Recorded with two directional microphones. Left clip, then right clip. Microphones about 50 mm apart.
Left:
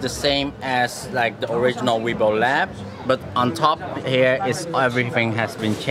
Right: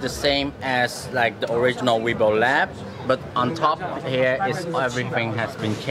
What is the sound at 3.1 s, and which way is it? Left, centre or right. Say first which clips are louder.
Speech: left 2 dB; left.